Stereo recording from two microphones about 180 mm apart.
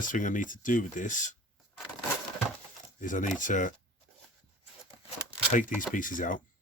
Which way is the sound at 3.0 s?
45° left (ahead or behind).